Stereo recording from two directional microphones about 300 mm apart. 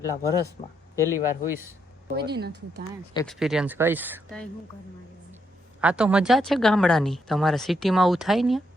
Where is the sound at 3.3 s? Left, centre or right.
Centre.